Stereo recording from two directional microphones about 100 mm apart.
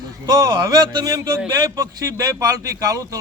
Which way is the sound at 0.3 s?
40° right (ahead or behind).